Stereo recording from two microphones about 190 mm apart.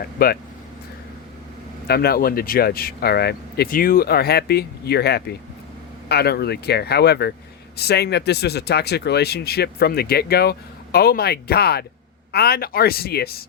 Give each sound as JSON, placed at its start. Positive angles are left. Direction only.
{"t": 0.2, "sound": "speech", "side_deg": 50}
{"t": 1.9, "sound": "speech", "side_deg": 55}